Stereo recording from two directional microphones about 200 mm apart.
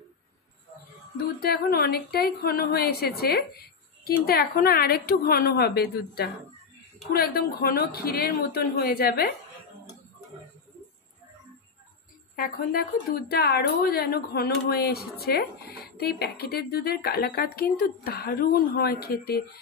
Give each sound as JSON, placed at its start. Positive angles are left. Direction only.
{"t": 1.4, "sound": "speech", "side_deg": 50}
{"t": 12.4, "sound": "speech", "side_deg": 45}